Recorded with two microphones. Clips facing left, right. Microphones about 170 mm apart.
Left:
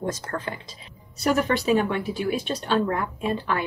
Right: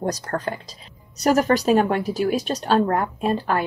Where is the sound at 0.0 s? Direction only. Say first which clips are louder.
Right 4 dB; 40° right (ahead or behind).